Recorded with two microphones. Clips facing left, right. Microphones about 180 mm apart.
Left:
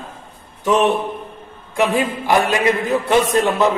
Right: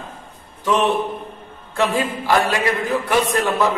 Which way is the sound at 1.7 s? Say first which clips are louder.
Left 2 dB; 20° left (ahead or behind).